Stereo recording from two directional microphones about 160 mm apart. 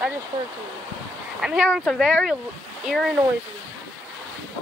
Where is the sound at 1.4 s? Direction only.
5° right (ahead or behind).